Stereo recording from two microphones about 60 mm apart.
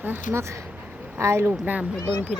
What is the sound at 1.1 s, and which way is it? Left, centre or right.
Speech, right.